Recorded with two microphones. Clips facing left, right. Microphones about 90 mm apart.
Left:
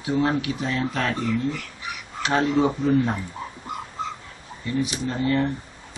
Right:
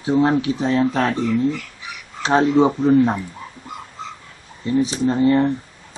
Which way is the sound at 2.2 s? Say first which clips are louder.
Right 6 dB; 30° right (ahead or behind).